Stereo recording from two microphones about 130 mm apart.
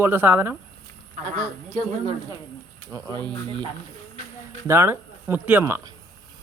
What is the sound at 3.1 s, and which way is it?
Speech, 35° right (ahead or behind).